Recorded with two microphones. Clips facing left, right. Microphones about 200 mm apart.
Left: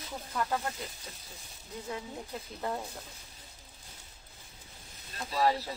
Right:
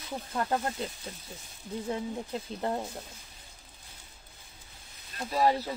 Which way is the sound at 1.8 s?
30° right (ahead or behind).